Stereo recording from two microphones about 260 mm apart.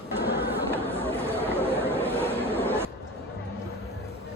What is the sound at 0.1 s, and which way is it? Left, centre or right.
Chatter, centre.